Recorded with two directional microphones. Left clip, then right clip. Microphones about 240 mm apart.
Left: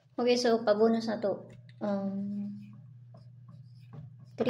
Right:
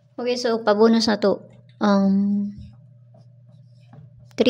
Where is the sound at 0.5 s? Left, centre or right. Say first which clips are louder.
Right 12 dB; right.